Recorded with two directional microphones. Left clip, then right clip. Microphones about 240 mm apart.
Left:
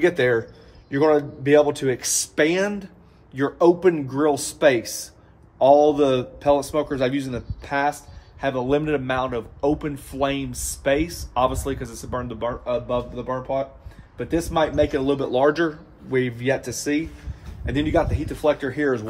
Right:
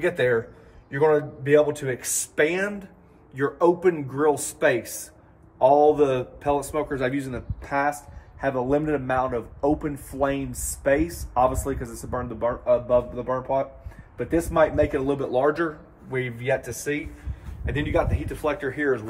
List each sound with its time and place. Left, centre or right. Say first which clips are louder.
0.0 s speech: left 3 dB; left
8.4 s a man's voice: left 1 dB; centre; by 19.0 s left